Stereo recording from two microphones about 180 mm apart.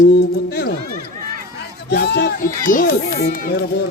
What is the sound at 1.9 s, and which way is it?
Speech, 70° left (ahead or behind).